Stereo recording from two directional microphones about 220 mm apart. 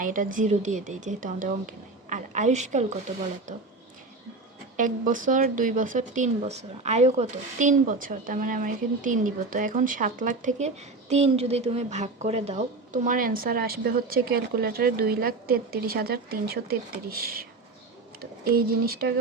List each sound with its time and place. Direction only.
0.0 s speech: 40° right (ahead or behind)
4.8 s speech: 35° right (ahead or behind)